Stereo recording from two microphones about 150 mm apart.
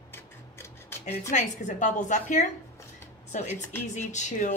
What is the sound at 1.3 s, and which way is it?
A woman's voice, 55° left (ahead or behind).